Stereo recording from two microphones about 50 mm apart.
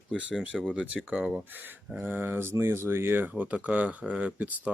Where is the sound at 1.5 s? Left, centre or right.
Right.